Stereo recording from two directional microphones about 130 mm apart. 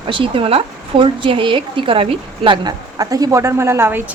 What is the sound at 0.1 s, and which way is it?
A woman's voice, 40° right (ahead or behind).